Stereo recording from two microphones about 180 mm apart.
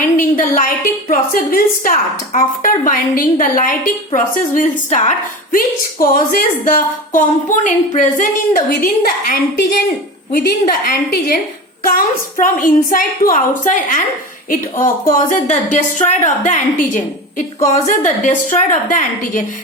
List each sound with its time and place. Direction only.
0.0 s a woman's voice: 50° left (ahead or behind)